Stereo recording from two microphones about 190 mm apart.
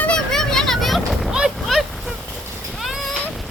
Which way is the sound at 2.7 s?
Centre (ahead or behind).